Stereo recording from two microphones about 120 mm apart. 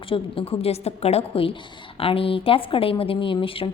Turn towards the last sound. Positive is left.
turn(degrees=50)  # may be behind; listen again after turning